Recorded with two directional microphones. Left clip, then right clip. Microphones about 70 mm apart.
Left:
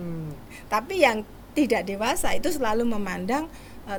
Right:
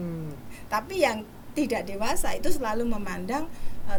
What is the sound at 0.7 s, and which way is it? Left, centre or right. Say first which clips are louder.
A woman's voice: left 4 dB; left.